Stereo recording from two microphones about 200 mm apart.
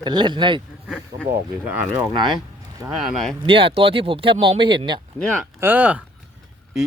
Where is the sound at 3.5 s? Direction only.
25° right (ahead or behind).